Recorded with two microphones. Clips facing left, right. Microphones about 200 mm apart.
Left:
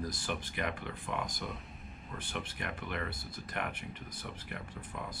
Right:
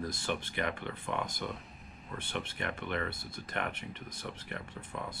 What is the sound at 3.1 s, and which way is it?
Speech, 25° right (ahead or behind).